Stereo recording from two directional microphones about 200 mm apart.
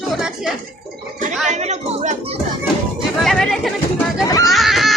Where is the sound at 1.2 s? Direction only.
35° right (ahead or behind).